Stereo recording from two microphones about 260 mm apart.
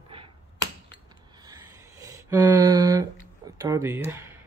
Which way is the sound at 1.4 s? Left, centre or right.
Centre.